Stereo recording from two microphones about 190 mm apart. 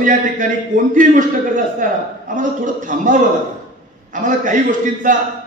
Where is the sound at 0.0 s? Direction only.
45° right (ahead or behind).